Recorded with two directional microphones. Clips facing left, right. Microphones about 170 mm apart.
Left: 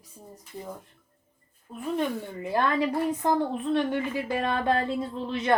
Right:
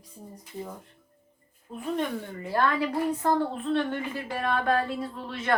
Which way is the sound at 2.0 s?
15° left (ahead or behind).